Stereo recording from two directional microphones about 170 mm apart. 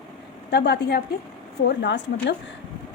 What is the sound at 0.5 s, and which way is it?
Speech, 80° left.